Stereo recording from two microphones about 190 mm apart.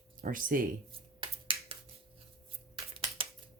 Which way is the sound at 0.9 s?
25° right (ahead or behind).